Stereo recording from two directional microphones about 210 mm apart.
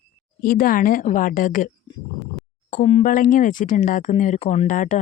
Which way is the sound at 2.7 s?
35° left (ahead or behind).